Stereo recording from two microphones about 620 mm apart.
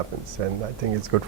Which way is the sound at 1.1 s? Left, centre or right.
Right.